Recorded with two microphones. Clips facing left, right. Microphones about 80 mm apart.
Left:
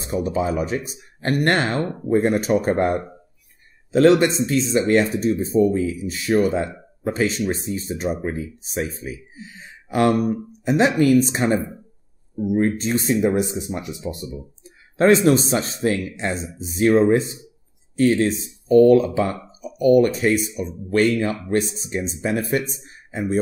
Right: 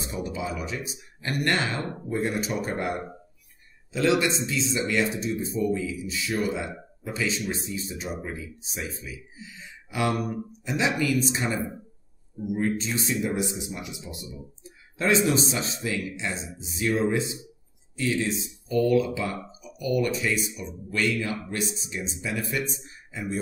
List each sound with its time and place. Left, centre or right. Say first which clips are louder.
0.0 s speech: left 9 dB; left